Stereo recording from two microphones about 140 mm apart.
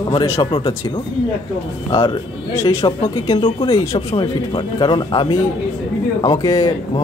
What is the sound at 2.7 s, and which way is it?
Speech, 20° left (ahead or behind).